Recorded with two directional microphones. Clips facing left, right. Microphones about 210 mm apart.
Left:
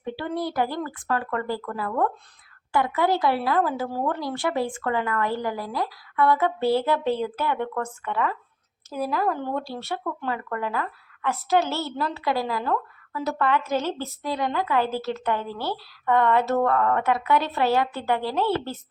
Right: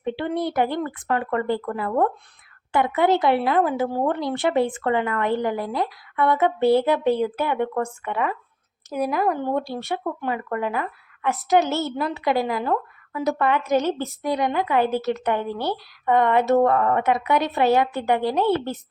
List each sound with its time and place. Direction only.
0.0 s a woman's voice: 20° right (ahead or behind)